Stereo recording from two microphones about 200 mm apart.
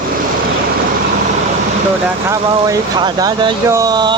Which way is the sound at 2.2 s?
20° right (ahead or behind).